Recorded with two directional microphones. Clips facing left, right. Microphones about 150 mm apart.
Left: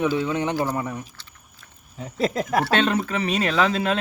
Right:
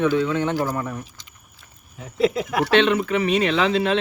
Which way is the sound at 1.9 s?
40° left (ahead or behind).